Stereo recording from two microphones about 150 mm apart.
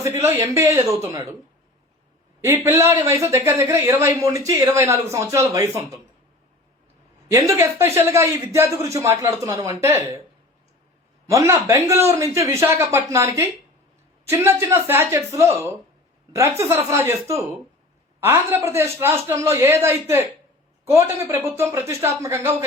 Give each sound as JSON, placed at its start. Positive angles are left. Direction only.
{"t": 0.0, "sound": "speech", "side_deg": -20}
{"t": 2.4, "sound": "speech", "side_deg": -15}
{"t": 7.3, "sound": "speech", "side_deg": -20}
{"t": 11.3, "sound": "speech", "side_deg": -20}